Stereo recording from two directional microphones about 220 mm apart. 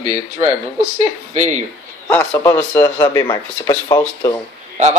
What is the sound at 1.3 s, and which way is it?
Speech, 30° right (ahead or behind).